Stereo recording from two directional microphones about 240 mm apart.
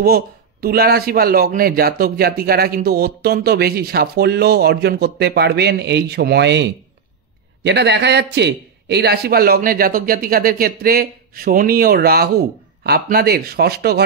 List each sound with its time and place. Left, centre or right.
0.0 s a man's voice: right